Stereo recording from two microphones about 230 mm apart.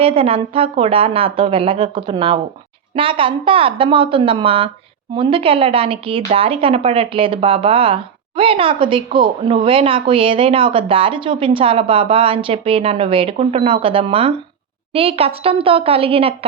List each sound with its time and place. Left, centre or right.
0.0 s a woman's voice: right